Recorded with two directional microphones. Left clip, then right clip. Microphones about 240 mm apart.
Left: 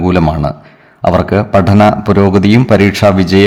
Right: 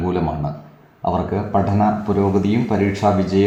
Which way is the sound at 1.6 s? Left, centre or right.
Left.